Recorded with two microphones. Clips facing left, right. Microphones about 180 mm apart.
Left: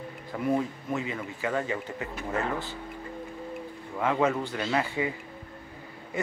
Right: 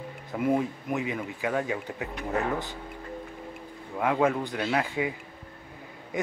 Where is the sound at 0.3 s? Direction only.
20° right (ahead or behind).